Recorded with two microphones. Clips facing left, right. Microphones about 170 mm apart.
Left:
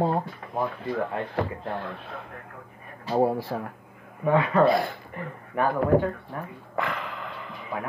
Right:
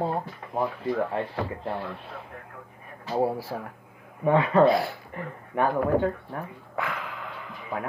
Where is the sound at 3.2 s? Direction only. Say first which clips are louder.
Left 2 dB; 15° left (ahead or behind).